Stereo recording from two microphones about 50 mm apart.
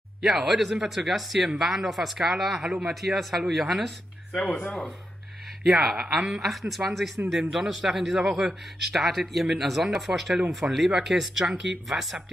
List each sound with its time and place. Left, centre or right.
0.2 s speech: centre
4.4 s speech: left
5.7 s speech: centre
10.9 s speech: centre